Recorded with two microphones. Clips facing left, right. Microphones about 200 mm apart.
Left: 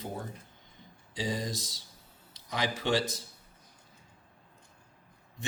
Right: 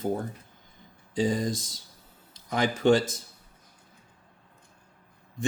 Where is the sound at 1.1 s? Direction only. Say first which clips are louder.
Right 8 dB; 50° right (ahead or behind).